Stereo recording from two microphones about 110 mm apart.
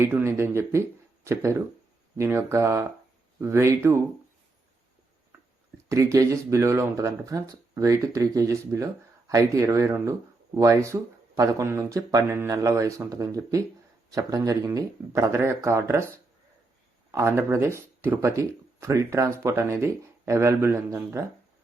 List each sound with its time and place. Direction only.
0.0 s speech: 20° right (ahead or behind)
5.7 s speech: 30° right (ahead or behind)
17.1 s speech: 25° right (ahead or behind)